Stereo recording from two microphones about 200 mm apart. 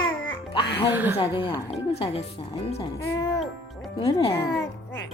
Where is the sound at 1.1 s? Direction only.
25° left (ahead or behind).